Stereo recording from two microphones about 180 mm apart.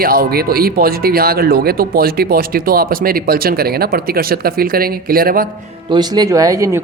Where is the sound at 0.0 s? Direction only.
55° right (ahead or behind).